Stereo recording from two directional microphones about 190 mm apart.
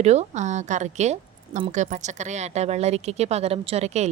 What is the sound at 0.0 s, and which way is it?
A woman's voice, 35° right (ahead or behind).